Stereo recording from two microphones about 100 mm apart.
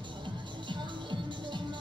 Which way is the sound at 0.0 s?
50° right (ahead or behind).